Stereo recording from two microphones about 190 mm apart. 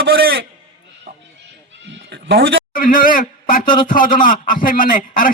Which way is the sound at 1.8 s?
70° right (ahead or behind).